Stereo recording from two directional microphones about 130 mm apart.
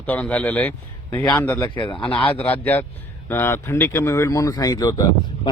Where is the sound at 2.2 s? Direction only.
15° left (ahead or behind).